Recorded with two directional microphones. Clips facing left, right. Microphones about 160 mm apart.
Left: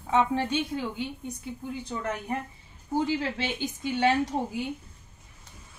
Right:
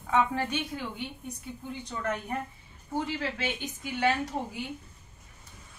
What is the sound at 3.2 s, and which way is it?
A woman's voice, 30° left (ahead or behind).